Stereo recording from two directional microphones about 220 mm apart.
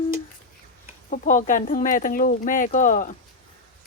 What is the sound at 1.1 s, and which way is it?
Speech, 35° left (ahead or behind).